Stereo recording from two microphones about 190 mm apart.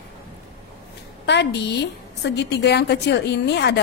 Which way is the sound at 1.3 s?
65° left (ahead or behind).